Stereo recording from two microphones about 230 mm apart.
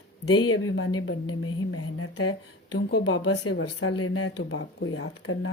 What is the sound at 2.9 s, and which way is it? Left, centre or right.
Speech, left.